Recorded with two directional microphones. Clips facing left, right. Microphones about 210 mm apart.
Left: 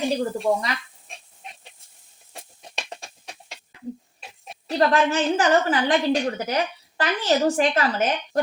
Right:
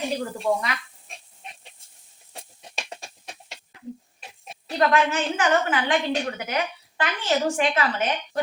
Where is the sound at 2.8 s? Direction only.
Centre (ahead or behind).